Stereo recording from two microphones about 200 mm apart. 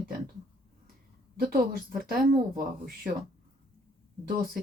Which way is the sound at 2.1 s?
45° right (ahead or behind).